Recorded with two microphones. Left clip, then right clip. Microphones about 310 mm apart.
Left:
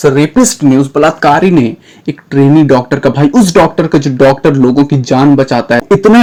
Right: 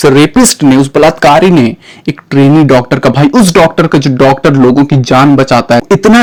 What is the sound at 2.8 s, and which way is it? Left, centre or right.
Beatboxing, right.